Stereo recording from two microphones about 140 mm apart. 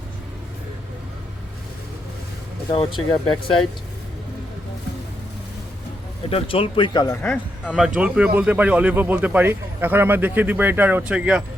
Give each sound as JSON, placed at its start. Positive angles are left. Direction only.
{"t": 2.6, "sound": "speech", "side_deg": 35}
{"t": 6.2, "sound": "speech", "side_deg": 40}
{"t": 7.1, "sound": "speech", "side_deg": 10}
{"t": 7.9, "sound": "speech", "side_deg": -10}